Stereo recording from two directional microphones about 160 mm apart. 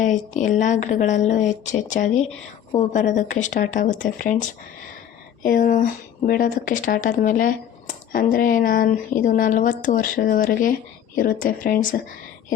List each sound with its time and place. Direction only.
0.0 s speech: 50° left (ahead or behind)